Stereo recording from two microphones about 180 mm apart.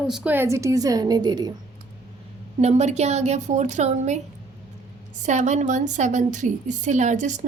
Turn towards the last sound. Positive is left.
turn(degrees=-45)  # may be behind; listen again after turning